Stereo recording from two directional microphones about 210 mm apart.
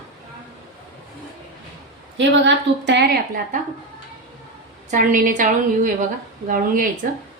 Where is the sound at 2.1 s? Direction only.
60° right (ahead or behind).